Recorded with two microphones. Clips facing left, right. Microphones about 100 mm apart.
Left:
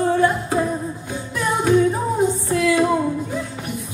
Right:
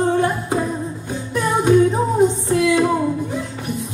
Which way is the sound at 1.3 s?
20° right (ahead or behind).